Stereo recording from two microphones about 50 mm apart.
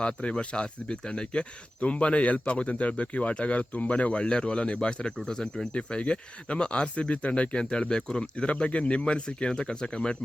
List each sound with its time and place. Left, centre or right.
0.0 s speech: left
5.7 s speech: left